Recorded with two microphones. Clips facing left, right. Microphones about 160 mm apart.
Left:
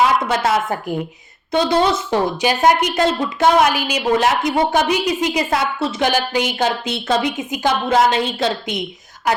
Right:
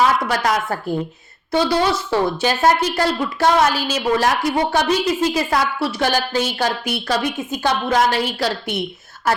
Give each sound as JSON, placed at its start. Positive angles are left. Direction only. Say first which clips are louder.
{"t": 0.3, "sound": "a woman's voice", "louder": "left 2 dB", "side_deg": 25}